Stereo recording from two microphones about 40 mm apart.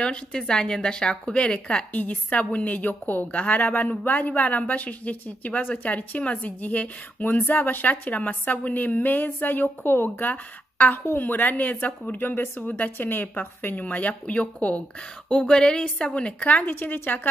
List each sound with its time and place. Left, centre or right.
0.3 s a woman's voice: centre
1.9 s a woman's voice: left
10.2 s a woman's voice: left
12.2 s speech: left
12.5 s speech: left
12.9 s speech: left
15.3 s a woman's voice: centre; by 17.3 s left